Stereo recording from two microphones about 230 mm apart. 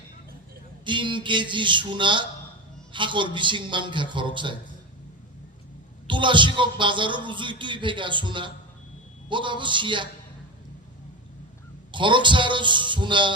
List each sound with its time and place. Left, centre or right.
0.9 s a man's voice: right
6.1 s a man's voice: right
11.9 s a man's voice: right